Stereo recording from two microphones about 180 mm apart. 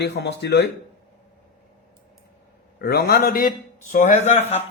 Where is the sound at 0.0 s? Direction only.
70° left (ahead or behind).